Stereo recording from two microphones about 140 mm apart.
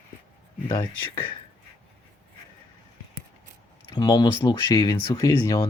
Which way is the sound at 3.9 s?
30° left (ahead or behind).